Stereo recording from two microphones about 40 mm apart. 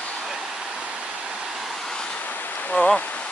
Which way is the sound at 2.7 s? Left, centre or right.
Left.